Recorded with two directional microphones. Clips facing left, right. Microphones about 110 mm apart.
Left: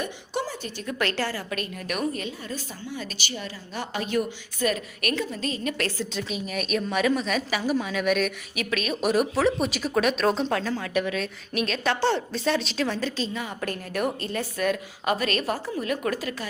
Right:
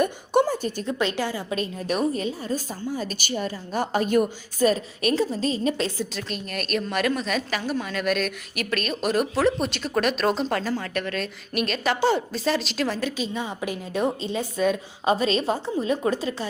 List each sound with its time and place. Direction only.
0.0 s a sound: 50° right (ahead or behind)
0.9 s a woman's voice: 20° right (ahead or behind); by 4.3 s 45° right (ahead or behind)
4.6 s a woman's voice: 30° right (ahead or behind)
6.1 s a woman's voice: centre (ahead or behind)
13.3 s a woman's voice: 25° right (ahead or behind)